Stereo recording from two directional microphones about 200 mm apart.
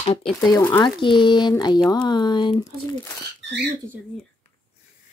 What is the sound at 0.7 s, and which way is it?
Speech, 20° left (ahead or behind).